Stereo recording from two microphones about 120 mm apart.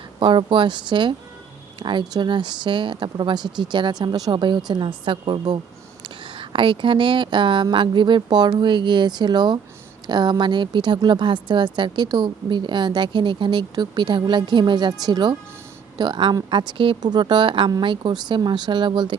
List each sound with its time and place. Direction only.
0.2 s a woman's voice: 45° right (ahead or behind)